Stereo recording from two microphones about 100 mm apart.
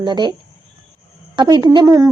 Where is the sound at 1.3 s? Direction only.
50° right (ahead or behind).